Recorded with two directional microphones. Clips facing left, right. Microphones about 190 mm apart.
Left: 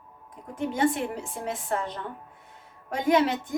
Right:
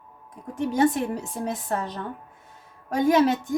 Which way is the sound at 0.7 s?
40° right (ahead or behind).